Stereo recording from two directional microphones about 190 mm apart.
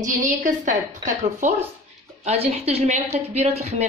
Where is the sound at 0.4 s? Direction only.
40° right (ahead or behind).